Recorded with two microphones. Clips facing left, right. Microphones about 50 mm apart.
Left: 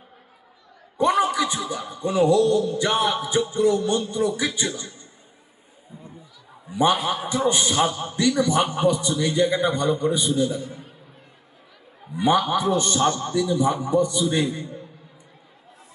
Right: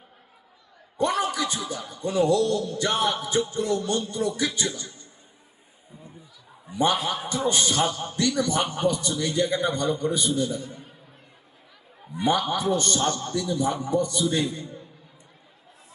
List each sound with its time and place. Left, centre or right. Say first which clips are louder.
0.9 s a man's voice: left 5 dB; left
6.7 s a man's voice: left 3 dB; left
12.2 s a man's voice: left 4 dB; centre